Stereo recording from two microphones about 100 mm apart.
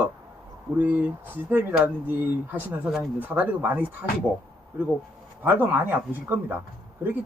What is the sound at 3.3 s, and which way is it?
Speech, 15° right (ahead or behind).